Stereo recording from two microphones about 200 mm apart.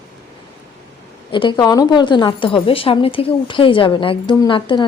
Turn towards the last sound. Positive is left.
turn(degrees=25)  # may be behind; listen again after turning